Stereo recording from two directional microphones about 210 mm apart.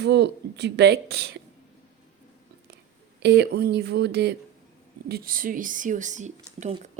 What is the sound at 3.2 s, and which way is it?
A woman's voice, 50° right (ahead or behind).